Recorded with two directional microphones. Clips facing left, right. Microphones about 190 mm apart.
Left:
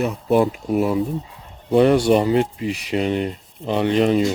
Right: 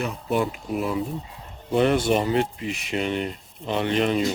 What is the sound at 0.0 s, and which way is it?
Speech, 40° left (ahead or behind).